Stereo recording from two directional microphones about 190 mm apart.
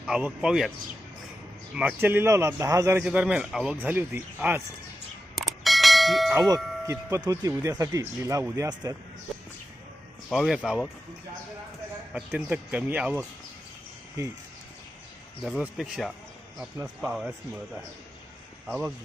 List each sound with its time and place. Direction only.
0.0 s speech: 5° right (ahead or behind)
1.7 s speech: 5° right (ahead or behind)
3.0 s speech: 5° right (ahead or behind)
5.3 s clang: centre (ahead or behind)
6.3 s speech: 15° right (ahead or behind)
10.2 s speech: centre (ahead or behind)
12.1 s speech: 10° right (ahead or behind)
15.4 s speech: 5° right (ahead or behind)
18.7 s speech: 10° right (ahead or behind)